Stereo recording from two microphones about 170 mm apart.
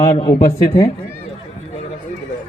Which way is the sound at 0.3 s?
20° left (ahead or behind).